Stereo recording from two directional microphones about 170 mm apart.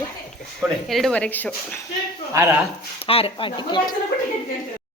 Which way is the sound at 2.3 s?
15° right (ahead or behind).